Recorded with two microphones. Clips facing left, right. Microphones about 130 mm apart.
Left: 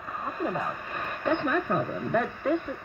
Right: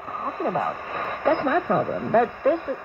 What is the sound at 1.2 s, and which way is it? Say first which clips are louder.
Speech: right 5 dB; 50° right (ahead or behind).